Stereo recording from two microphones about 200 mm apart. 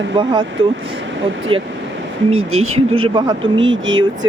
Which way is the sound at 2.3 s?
90° right.